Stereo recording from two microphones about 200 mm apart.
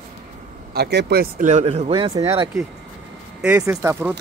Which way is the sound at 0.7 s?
55° right (ahead or behind).